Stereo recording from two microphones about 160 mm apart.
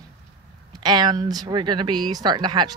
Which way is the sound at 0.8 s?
25° right (ahead or behind).